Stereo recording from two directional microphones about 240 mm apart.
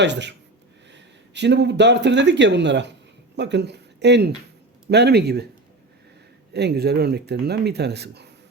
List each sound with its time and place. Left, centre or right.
0.0 s speech: right
6.5 s speech: right